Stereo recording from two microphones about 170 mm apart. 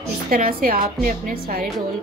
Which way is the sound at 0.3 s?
60° right (ahead or behind).